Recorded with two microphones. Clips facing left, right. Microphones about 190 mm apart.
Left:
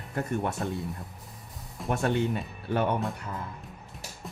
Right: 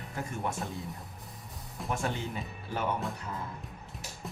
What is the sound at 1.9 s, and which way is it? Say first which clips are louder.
Speech: left 7 dB; 65° left (ahead or behind).